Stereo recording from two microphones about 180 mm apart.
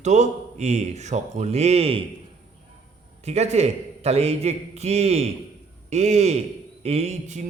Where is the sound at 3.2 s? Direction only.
35° right (ahead or behind).